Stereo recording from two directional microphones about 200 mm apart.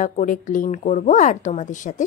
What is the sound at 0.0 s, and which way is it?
A woman's voice, 40° left (ahead or behind).